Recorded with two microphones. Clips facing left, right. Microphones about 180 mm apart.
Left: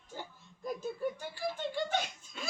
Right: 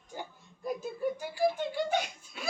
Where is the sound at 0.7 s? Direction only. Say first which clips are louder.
Right 1 dB; 10° right (ahead or behind).